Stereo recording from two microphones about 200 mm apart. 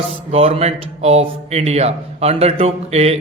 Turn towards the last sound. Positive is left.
turn(degrees=-30)  # may be behind; listen again after turning